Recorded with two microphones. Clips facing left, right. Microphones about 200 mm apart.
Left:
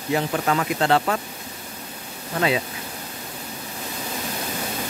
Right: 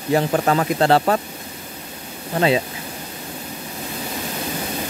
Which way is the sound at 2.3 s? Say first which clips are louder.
Right 4 dB; 30° right (ahead or behind).